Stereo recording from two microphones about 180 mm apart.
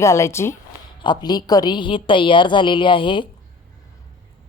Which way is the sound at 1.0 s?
25° left (ahead or behind).